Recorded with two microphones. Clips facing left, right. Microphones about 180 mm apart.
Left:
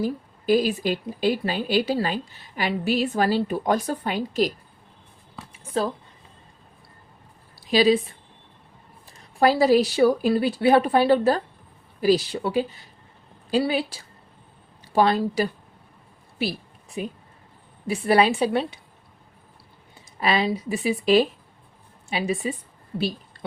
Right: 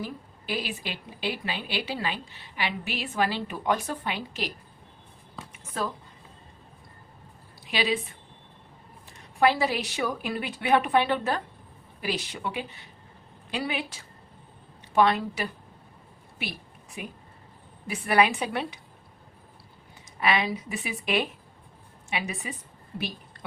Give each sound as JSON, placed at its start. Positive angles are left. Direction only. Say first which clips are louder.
{"t": 0.0, "sound": "speech", "louder": "left 10 dB", "side_deg": 40}
{"t": 7.6, "sound": "a woman's voice", "louder": "left 9 dB", "side_deg": 40}
{"t": 9.4, "sound": "speech", "louder": "left 7 dB", "side_deg": 40}
{"t": 16.4, "sound": "a sound", "louder": "left 10 dB", "side_deg": 30}
{"t": 17.8, "sound": "a woman's voice", "louder": "left 4 dB", "side_deg": 30}
{"t": 20.1, "sound": "speech", "louder": "left 3 dB", "side_deg": 35}